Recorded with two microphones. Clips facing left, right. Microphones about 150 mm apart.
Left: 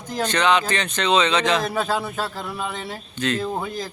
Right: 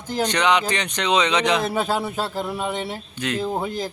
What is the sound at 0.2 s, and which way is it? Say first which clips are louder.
Speech: even; 15° right (ahead or behind).